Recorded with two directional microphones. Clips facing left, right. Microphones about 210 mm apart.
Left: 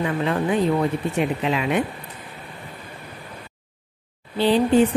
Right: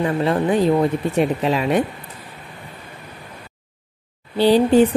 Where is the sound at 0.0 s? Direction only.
35° right (ahead or behind).